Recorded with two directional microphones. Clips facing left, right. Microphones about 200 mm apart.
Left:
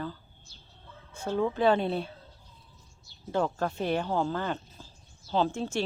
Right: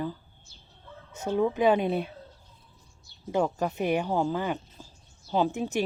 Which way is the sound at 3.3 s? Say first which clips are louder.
Right 2 dB; 10° right (ahead or behind).